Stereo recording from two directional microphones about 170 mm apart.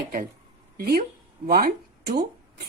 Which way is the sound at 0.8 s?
60° right (ahead or behind).